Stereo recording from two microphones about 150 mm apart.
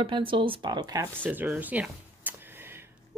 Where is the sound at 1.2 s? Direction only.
10° right (ahead or behind).